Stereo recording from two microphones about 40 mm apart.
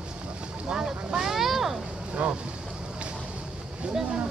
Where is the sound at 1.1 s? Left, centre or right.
Centre.